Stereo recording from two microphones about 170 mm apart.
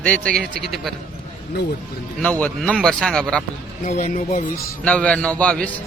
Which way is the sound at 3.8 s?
50° left (ahead or behind).